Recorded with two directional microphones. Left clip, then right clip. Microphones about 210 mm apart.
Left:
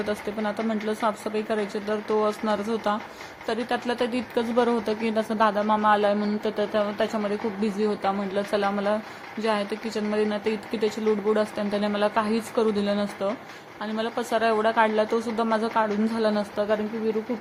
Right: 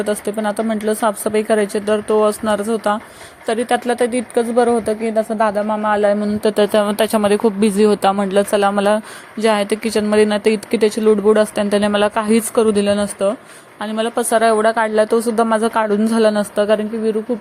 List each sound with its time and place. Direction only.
0.0 s speech: 30° right (ahead or behind)
6.4 s speech: 45° right (ahead or behind)